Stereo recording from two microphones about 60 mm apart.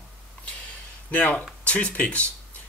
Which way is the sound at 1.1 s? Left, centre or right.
Left.